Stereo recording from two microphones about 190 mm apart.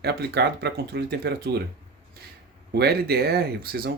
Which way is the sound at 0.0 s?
60° right (ahead or behind).